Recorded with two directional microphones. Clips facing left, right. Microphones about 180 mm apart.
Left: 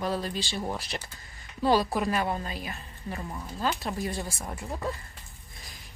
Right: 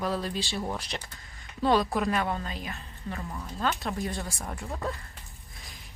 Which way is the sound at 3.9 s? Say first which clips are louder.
Even; centre (ahead or behind).